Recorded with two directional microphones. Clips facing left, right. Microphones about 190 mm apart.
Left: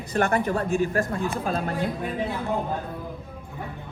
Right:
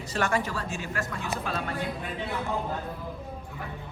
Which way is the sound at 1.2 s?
35° left (ahead or behind).